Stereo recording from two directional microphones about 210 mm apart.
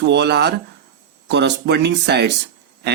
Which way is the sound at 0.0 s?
55° right (ahead or behind).